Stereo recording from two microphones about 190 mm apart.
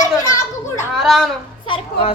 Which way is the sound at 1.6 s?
30° left (ahead or behind).